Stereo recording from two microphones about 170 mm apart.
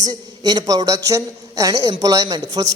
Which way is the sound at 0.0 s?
25° right (ahead or behind).